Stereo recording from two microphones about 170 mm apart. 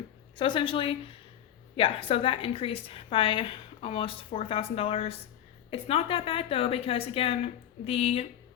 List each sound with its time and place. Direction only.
0.3 s a woman's voice: 30° left (ahead or behind)